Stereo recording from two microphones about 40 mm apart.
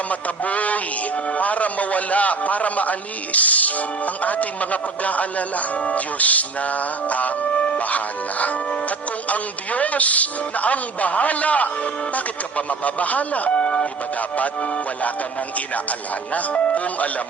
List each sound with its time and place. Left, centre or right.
0.1 s speech: left
14.2 s speech: left